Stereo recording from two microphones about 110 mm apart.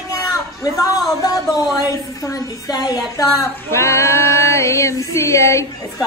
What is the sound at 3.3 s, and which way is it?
Female singing, 25° left (ahead or behind).